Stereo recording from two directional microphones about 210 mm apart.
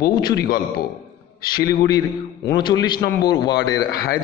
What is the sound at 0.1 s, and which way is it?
Speech, 20° left (ahead or behind).